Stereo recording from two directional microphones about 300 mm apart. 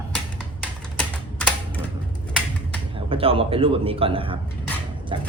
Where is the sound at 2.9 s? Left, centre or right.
Centre.